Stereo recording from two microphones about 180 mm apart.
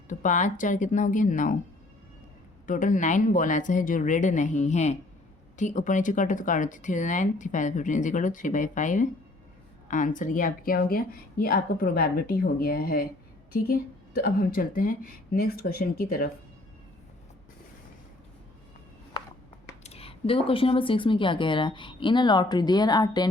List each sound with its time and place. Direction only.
0.1 s speech: 45° left (ahead or behind)
2.6 s speech: 45° left (ahead or behind)
19.8 s speech: 35° left (ahead or behind)